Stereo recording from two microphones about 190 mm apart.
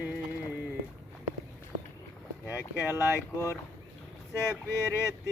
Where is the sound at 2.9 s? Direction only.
15° left (ahead or behind).